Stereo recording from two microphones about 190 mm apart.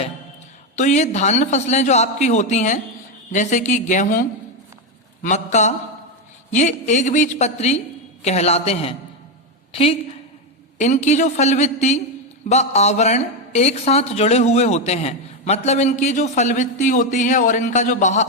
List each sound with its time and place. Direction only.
0.8 s a woman's voice: 35° left (ahead or behind)